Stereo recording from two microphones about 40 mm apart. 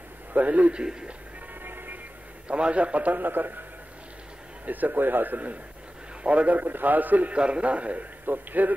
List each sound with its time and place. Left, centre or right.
0.3 s a man's voice: right
1.6 s vehicle: right
2.4 s a man's voice: right
3.2 s a man's voice: right
4.6 s a man's voice: right
7.3 s a man's voice: right
8.3 s a man's voice: right